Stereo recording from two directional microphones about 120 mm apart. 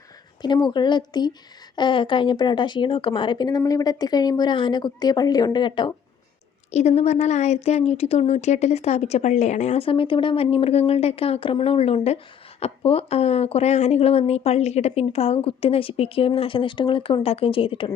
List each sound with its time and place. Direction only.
0.4 s speech: 40° left (ahead or behind)
6.7 s a woman's voice: 65° left (ahead or behind)
9.8 s a woman's voice: 50° left (ahead or behind)